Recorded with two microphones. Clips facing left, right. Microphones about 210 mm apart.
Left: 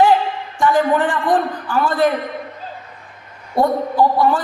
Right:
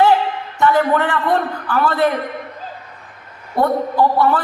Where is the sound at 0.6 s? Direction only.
15° left (ahead or behind).